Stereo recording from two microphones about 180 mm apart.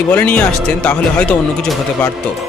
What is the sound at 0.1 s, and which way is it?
Speech, 10° left (ahead or behind).